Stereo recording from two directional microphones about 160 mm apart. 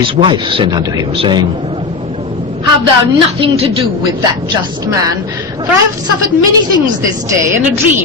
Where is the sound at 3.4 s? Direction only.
35° right (ahead or behind).